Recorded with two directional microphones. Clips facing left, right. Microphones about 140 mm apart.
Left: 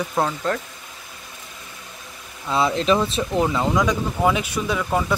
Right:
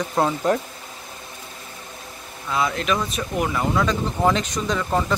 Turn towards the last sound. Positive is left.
turn(degrees=5)  # may be behind; listen again after turning